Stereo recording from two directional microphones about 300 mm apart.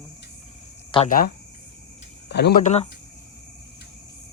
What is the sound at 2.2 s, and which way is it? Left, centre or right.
Speech, left.